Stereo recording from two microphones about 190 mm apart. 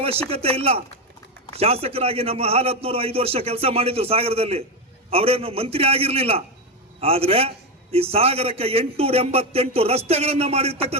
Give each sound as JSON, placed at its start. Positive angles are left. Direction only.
{"t": 0.0, "sound": "a man's voice", "side_deg": -30}